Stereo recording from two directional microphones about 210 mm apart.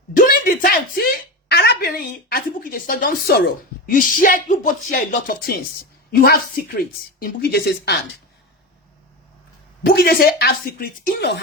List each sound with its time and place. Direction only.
0.2 s a woman's voice: 40° left (ahead or behind)
9.8 s speech: 50° left (ahead or behind)